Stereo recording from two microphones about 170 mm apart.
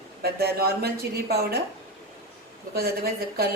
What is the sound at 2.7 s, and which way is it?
Speech, 65° right (ahead or behind).